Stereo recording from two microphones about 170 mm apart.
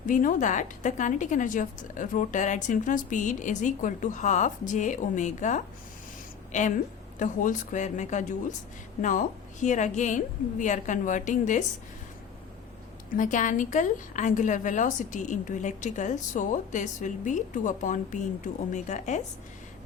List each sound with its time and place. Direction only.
0.0 s a woman's voice: 50° left (ahead or behind)
13.1 s a woman's voice: 50° left (ahead or behind)